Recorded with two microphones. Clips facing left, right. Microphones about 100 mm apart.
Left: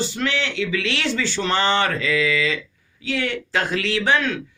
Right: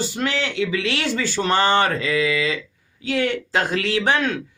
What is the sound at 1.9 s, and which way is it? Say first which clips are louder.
Speech: even; 30° right (ahead or behind).